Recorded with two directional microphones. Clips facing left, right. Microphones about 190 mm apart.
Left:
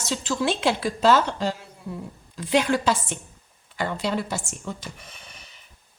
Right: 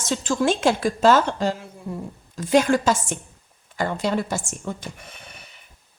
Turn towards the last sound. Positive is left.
turn(degrees=-55)  # may be behind; listen again after turning